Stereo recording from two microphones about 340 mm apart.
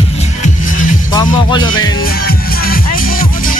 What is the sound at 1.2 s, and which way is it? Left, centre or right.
Music, centre.